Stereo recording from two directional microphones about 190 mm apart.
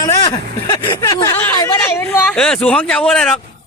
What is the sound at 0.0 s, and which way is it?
Speech, 20° left (ahead or behind).